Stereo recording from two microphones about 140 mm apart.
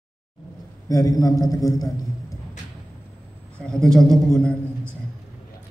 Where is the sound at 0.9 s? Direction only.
25° left (ahead or behind).